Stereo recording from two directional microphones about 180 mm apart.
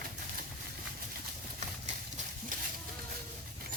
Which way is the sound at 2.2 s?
40° right (ahead or behind).